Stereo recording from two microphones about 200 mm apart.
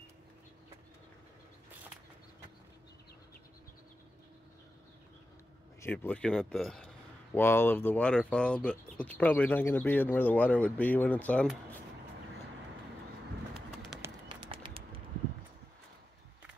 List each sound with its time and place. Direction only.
5.8 s speech: 10° left (ahead or behind)
14.0 s bird: 25° right (ahead or behind)